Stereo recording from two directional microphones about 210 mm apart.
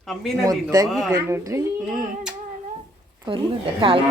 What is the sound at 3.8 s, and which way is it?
Speech, 25° right (ahead or behind).